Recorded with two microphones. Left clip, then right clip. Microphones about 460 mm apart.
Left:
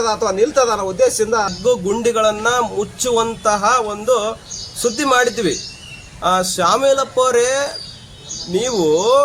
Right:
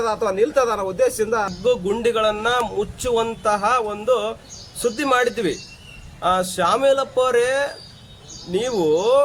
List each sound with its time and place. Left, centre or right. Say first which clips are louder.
0.0 s speech: left 3 dB; right